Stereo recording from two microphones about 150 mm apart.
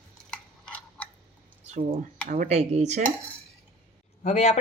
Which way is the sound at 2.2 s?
55° right (ahead or behind).